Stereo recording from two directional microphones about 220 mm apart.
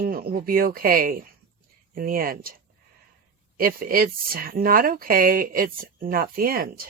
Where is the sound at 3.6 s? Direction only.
40° right (ahead or behind).